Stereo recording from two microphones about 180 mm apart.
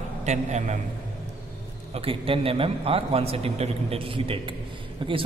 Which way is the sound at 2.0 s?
30° right (ahead or behind).